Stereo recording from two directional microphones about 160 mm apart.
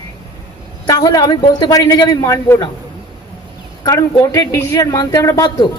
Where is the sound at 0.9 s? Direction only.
25° left (ahead or behind).